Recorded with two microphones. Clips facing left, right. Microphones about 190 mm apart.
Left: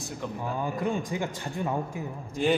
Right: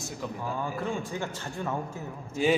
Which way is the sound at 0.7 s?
15° left (ahead or behind).